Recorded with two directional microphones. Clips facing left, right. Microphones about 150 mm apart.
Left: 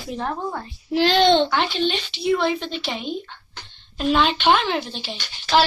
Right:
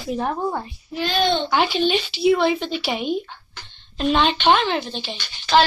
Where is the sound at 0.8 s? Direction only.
85° left.